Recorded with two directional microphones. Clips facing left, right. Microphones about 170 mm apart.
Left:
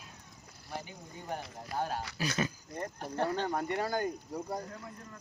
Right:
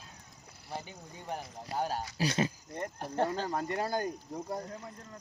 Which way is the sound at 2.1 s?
30° right (ahead or behind).